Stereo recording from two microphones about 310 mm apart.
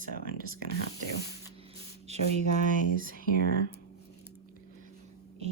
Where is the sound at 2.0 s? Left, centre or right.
Right.